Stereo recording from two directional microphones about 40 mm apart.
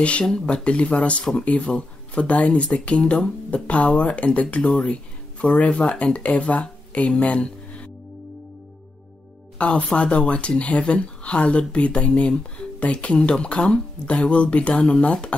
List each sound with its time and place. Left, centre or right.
0.0 s speech: left
9.6 s speech: left